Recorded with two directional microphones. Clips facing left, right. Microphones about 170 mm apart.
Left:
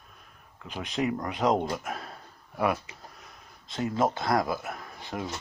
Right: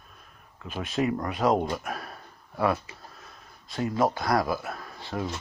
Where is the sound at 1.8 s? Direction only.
20° left (ahead or behind).